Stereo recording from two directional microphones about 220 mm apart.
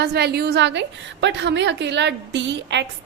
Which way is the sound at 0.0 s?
50° right (ahead or behind).